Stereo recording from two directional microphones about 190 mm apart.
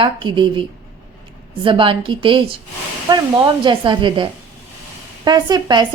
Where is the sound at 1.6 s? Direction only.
25° right (ahead or behind).